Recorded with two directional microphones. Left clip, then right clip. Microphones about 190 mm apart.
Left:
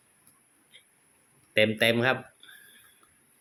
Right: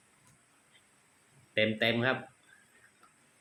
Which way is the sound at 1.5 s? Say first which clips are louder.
Left 6 dB; 45° left (ahead or behind).